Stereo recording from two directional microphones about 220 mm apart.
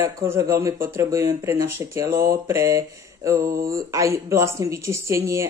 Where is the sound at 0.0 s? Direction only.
10° right (ahead or behind).